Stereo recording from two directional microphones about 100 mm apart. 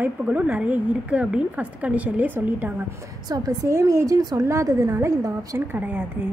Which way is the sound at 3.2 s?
40° right (ahead or behind).